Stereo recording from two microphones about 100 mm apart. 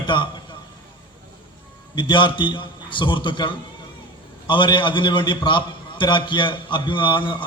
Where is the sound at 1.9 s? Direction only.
50° left (ahead or behind).